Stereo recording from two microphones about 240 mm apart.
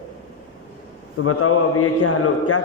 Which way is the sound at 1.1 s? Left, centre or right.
Left.